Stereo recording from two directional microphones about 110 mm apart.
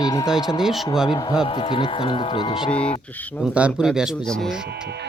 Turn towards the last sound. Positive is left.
turn(degrees=-10)  # may be behind; listen again after turning